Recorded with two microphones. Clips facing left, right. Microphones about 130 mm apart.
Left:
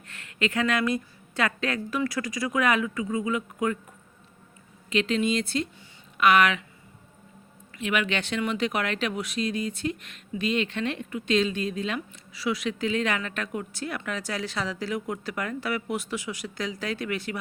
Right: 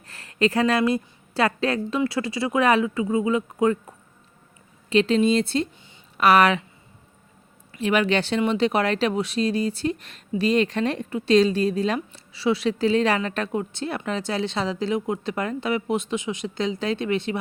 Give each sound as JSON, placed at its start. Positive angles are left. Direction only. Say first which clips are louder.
{"t": 0.1, "sound": "speech", "louder": "right 6 dB", "side_deg": -35}
{"t": 4.9, "sound": "speech", "louder": "right 6 dB", "side_deg": -30}
{"t": 7.8, "sound": "speech", "louder": "right 6 dB", "side_deg": -35}